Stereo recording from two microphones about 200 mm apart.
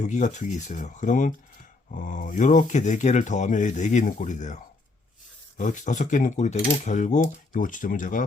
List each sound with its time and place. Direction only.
0.0 s speech: 40° left (ahead or behind)